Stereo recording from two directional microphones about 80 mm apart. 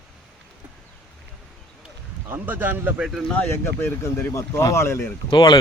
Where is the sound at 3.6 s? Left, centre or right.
Left.